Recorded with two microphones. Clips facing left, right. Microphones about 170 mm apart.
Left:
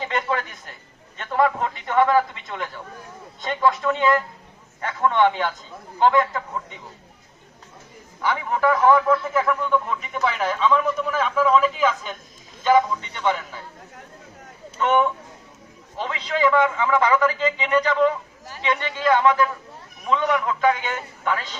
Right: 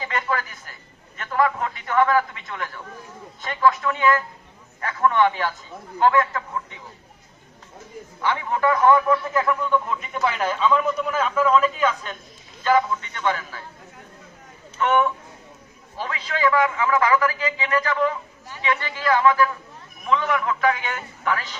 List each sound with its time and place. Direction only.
0.2 s a sound: 25° left (ahead or behind)
1.3 s a man's voice: 20° left (ahead or behind)
8.2 s a man's voice: 10° left (ahead or behind)
14.8 s a man's voice: 15° left (ahead or behind)
20.1 s a man's voice: 10° left (ahead or behind)
20.6 s a man's voice: 25° left (ahead or behind)